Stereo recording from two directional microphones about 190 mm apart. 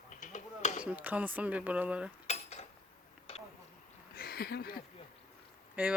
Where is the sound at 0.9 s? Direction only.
10° right (ahead or behind).